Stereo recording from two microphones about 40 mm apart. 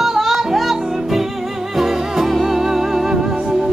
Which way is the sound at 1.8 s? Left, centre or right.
Centre.